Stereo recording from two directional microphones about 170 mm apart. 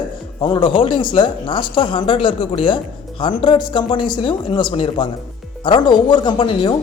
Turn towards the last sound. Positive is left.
turn(degrees=30)  # may be behind; listen again after turning